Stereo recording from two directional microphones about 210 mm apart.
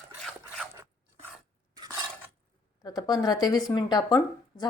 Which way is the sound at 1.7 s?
20° right (ahead or behind).